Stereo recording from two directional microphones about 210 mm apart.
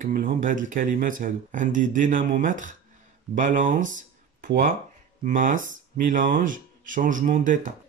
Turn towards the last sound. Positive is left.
turn(degrees=-35)  # may be behind; listen again after turning